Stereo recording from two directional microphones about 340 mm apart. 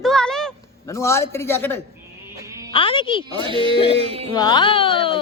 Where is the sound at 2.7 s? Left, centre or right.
Centre.